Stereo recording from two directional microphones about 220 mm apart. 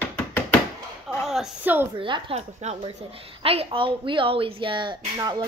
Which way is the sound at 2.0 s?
25° right (ahead or behind).